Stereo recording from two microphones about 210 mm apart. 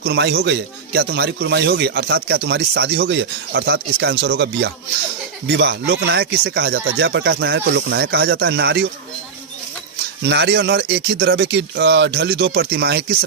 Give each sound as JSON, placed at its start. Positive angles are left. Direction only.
{"t": 0.0, "sound": "a man's voice", "side_deg": -50}
{"t": 10.2, "sound": "a man's voice", "side_deg": -55}